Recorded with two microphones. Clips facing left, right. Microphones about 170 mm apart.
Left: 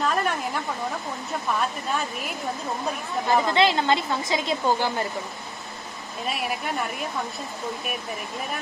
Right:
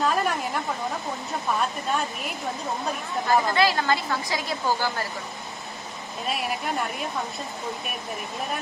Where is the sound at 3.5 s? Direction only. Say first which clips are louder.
Left 2 dB; 20° left (ahead or behind).